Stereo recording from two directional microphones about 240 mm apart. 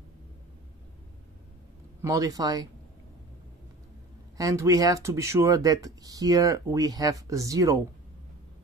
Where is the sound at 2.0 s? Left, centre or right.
Centre.